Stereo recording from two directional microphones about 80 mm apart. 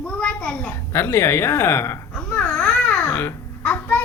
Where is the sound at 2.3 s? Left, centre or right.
Centre.